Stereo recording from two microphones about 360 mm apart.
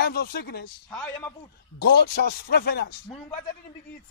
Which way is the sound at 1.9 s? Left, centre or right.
Left.